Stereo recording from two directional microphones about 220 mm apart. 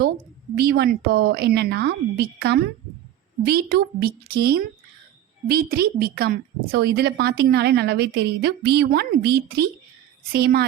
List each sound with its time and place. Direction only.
0.5 s a woman's voice: 45° right (ahead or behind)